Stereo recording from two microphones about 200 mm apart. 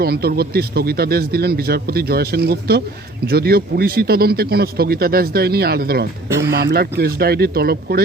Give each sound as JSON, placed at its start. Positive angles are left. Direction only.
{"t": 0.0, "sound": "speech", "side_deg": -50}